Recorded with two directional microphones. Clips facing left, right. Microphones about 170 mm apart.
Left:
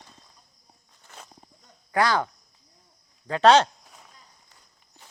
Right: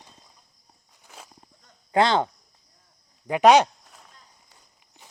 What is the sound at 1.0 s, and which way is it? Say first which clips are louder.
Walk: even; 5° right (ahead or behind).